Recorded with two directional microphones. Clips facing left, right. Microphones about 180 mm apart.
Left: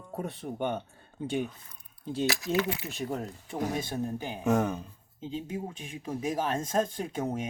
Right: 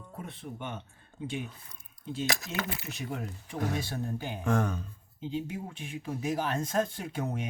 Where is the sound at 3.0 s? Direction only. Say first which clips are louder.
Left 3 dB; 40° left (ahead or behind).